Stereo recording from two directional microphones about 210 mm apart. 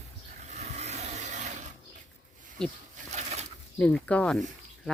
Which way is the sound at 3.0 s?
30° right (ahead or behind).